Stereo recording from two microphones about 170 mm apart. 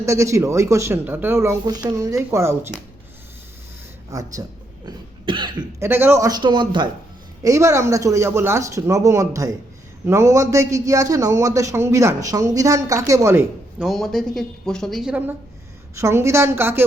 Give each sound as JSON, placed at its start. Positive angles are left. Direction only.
{"t": 0.0, "sound": "speech", "side_deg": -15}
{"t": 4.1, "sound": "a man's voice", "side_deg": -20}
{"t": 4.9, "sound": "cough", "side_deg": -30}
{"t": 5.8, "sound": "a man's voice", "side_deg": -15}
{"t": 13.8, "sound": "a woman's voice", "side_deg": 0}
{"t": 16.0, "sound": "speech", "side_deg": -15}